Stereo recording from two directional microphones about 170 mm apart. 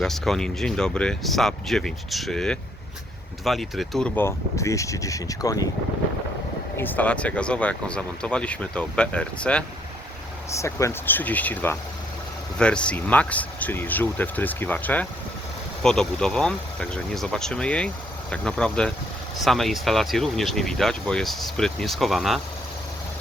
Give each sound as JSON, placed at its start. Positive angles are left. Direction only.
{"t": 0.0, "sound": "speech", "side_deg": 0}
{"t": 6.7, "sound": "speech", "side_deg": 10}
{"t": 10.5, "sound": "speech", "side_deg": 15}